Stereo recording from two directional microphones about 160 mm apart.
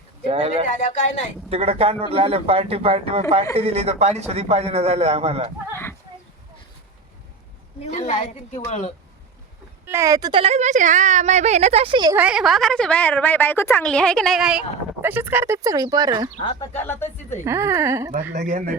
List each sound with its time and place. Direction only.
0.3 s a man's voice: 35° right (ahead or behind)
0.7 s a woman's voice: 50° left (ahead or behind)
1.5 s a man's voice: 40° right (ahead or behind)
7.8 s a woman's voice: 40° left (ahead or behind)
9.8 s speech: 15° right (ahead or behind)
10.4 s a woman's voice: 45° right (ahead or behind)
12.1 s a woman's voice: 5° right (ahead or behind)
15.0 s speech: 15° right (ahead or behind)
16.4 s speech: 30° left (ahead or behind)
17.0 s a woman's voice: 15° left (ahead or behind)
17.4 s a woman's voice: 15° right (ahead or behind)
18.3 s a woman's voice: 50° right (ahead or behind)